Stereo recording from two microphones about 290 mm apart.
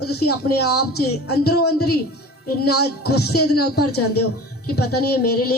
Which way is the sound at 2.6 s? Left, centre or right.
Left.